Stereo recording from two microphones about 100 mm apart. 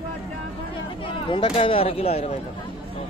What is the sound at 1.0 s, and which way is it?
Speech, 60° left (ahead or behind).